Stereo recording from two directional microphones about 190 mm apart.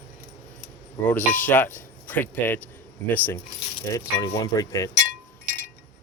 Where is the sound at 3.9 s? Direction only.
20° left (ahead or behind).